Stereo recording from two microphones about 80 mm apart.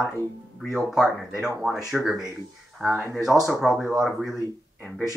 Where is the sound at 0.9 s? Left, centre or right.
Centre.